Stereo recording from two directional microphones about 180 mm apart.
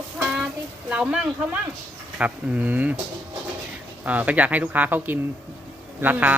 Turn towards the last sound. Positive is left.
turn(degrees=-10)  # may be behind; listen again after turning